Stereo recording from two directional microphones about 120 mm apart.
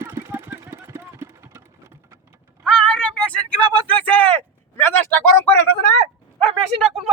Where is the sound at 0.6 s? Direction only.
20° right (ahead or behind).